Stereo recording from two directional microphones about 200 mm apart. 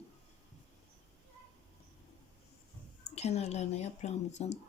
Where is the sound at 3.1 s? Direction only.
30° left (ahead or behind).